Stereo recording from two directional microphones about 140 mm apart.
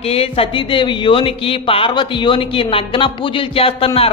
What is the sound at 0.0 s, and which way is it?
A man's voice, 45° left (ahead or behind).